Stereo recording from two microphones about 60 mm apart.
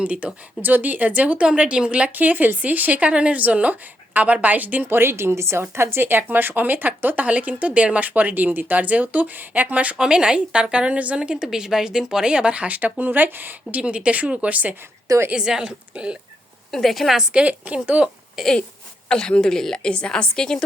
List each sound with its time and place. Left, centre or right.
0.0 s speech: right
10.0 s a woman's voice: centre
15.4 s a woman's voice: centre
16.7 s a woman's voice: centre
17.3 s speech: centre
18.4 s a woman's voice: centre
19.0 s a woman's voice: centre